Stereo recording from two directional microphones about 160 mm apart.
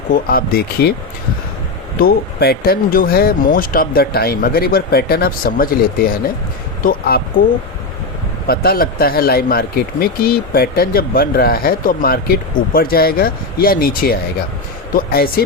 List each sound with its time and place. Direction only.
0.1 s speech: 65° left (ahead or behind)
2.0 s speech: 70° left (ahead or behind)
8.4 s speech: 70° left (ahead or behind)